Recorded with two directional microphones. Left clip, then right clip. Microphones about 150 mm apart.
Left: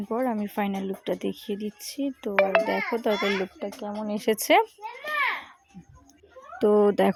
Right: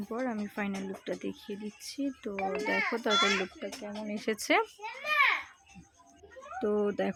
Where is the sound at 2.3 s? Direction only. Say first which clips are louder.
Left 14 dB; 60° left (ahead or behind).